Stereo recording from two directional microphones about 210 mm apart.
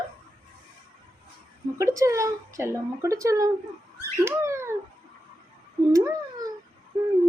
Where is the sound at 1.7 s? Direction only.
15° right (ahead or behind).